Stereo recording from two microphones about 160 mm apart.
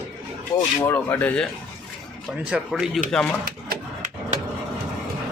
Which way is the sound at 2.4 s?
5° right (ahead or behind).